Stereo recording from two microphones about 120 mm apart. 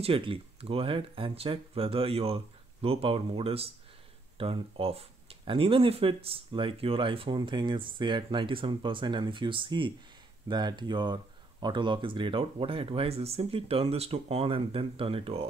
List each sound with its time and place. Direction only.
0.0 s speech: 50° right (ahead or behind)